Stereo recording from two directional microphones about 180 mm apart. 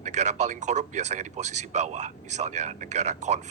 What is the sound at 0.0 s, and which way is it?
Speech, 40° right (ahead or behind).